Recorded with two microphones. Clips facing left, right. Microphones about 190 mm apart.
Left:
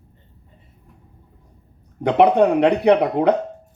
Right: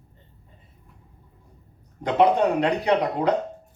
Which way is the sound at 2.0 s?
60° left (ahead or behind).